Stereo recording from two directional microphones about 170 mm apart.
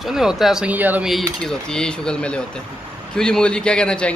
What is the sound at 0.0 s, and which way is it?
A man's voice, 5° right (ahead or behind).